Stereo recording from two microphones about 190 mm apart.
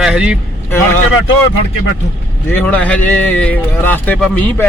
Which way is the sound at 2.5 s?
5° left (ahead or behind).